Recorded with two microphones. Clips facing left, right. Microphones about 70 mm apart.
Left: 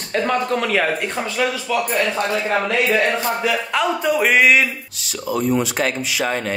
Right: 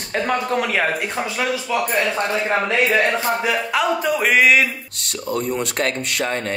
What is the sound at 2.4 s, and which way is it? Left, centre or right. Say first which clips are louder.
Speech: right 1 dB; centre.